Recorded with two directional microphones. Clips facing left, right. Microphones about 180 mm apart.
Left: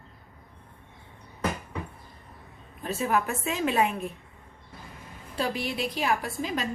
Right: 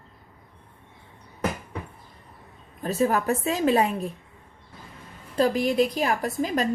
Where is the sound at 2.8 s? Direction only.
40° right (ahead or behind).